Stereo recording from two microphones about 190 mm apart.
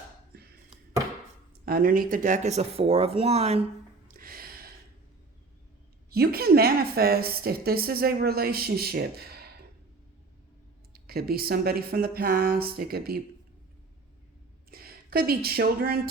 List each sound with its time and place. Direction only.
0.3 s a sound: 55° right (ahead or behind)
1.6 s speech: 50° right (ahead or behind); by 3.6 s 35° right (ahead or behind)
4.1 s a sound: 50° right (ahead or behind)
6.1 s a woman's voice: 55° right (ahead or behind)
10.9 s a woman's voice: 55° right (ahead or behind)
14.7 s a woman's voice: 55° right (ahead or behind)